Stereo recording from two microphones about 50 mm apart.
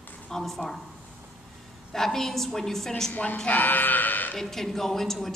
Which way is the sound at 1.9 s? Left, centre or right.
Centre.